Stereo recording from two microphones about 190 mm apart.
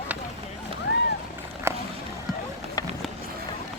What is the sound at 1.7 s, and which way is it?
Run, 15° right (ahead or behind).